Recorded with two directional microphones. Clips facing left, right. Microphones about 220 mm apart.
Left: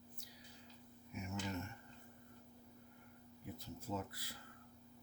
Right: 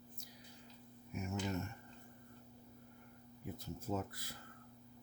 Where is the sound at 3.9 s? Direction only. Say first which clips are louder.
Right 4 dB; 45° right (ahead or behind).